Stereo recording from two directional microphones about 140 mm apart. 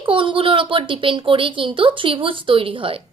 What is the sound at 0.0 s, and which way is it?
A woman's voice, 35° right (ahead or behind).